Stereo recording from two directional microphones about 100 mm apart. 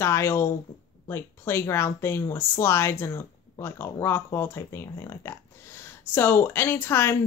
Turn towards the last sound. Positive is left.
turn(degrees=25)  # may be behind; listen again after turning